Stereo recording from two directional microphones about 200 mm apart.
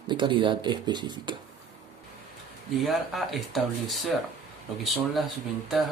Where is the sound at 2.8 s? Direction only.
Centre (ahead or behind).